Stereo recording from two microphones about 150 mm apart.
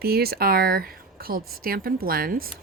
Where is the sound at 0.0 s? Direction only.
90° right.